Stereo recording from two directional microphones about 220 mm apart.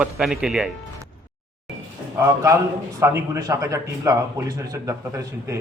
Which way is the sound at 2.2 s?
15° right (ahead or behind).